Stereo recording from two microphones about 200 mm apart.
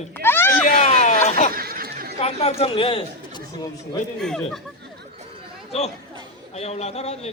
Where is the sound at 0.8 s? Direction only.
35° left (ahead or behind).